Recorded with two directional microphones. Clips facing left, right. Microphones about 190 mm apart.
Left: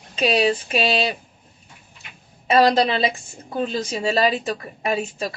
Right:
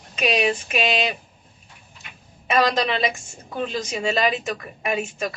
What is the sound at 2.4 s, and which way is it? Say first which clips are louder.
A woman's voice: left 4 dB; 30° left (ahead or behind).